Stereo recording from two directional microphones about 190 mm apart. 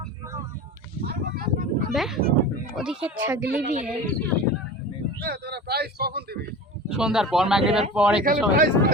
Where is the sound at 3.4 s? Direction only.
50° right (ahead or behind).